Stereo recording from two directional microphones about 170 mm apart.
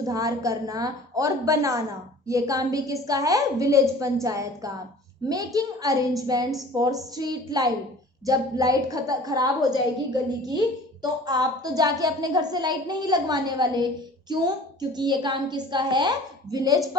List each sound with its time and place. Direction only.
0.0 s a woman's voice: 20° right (ahead or behind)